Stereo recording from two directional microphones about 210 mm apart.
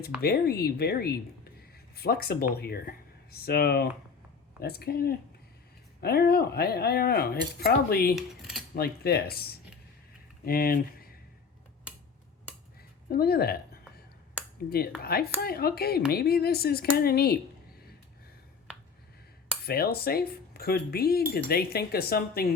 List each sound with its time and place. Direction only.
0.2 s speech: 45° left (ahead or behind)
8.1 s cutlery: centre (ahead or behind)
8.7 s speech: 45° left (ahead or behind)
13.1 s speech: 45° left (ahead or behind)
14.7 s speech: 45° left (ahead or behind)
19.6 s speech: 45° left (ahead or behind)